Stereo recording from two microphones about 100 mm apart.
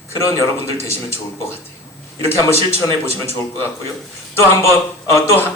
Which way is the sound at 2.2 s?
25° left (ahead or behind).